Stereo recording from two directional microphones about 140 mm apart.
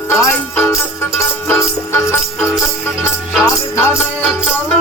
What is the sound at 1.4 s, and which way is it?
Music, 15° left (ahead or behind).